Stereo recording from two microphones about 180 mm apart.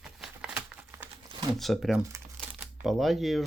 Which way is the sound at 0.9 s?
15° right (ahead or behind).